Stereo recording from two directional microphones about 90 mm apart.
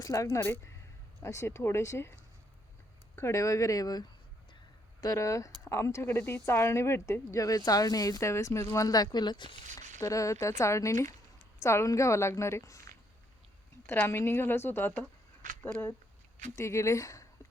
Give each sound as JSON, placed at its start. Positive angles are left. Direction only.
{"t": 0.0, "sound": "speech", "side_deg": 40}
{"t": 3.2, "sound": "speech", "side_deg": 35}
{"t": 10.0, "sound": "speech", "side_deg": 35}
{"t": 13.8, "sound": "a woman's voice", "side_deg": 25}
{"t": 16.6, "sound": "speech", "side_deg": 35}